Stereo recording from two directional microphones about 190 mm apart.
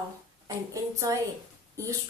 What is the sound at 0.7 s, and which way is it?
Speech, 15° right (ahead or behind).